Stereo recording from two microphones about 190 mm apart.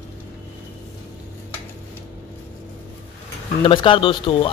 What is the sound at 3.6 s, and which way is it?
Speech, 25° left (ahead or behind).